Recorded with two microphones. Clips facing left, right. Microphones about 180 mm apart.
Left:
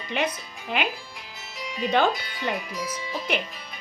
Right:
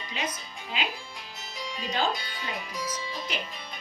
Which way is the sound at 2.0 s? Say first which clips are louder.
Left 6 dB; 65° left (ahead or behind).